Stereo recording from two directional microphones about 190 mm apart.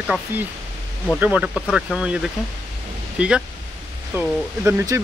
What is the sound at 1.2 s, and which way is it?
Speech, 5° right (ahead or behind).